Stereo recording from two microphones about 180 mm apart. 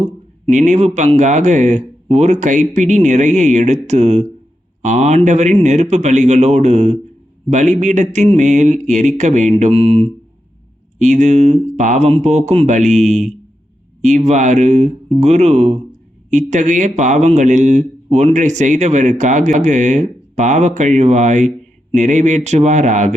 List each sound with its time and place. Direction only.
0.0 s speech: 40° right (ahead or behind)